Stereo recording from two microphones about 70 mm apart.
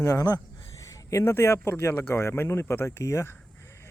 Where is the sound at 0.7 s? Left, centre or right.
Left.